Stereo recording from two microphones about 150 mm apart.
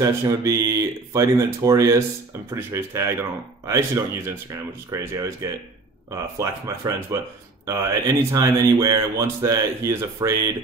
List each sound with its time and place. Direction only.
0.0 s speech: 20° right (ahead or behind)